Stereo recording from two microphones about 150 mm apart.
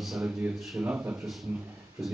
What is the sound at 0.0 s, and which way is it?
A man's voice, centre (ahead or behind).